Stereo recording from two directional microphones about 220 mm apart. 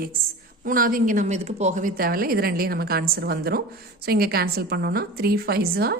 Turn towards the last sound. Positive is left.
turn(degrees=-45)  # may be behind; listen again after turning